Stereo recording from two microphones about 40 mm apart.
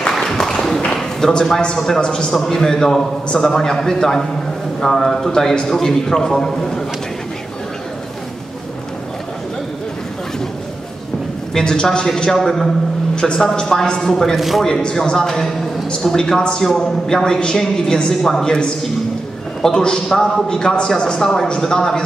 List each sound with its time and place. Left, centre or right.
0.1 s a sound: centre
1.2 s a man's voice: centre
2.3 s a man's voice: centre
5.3 s a man's voice: centre
11.5 s a man's voice: left
12.1 s a man's voice: centre
13.1 s a sound: left
13.4 s a man's voice: centre
14.3 s a man's voice: centre
14.8 s a man's voice: left